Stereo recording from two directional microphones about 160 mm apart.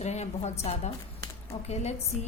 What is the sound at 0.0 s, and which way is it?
A woman's voice, 45° left (ahead or behind).